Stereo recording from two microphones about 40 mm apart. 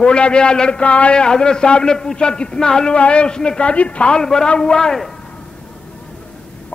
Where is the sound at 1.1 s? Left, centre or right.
Left.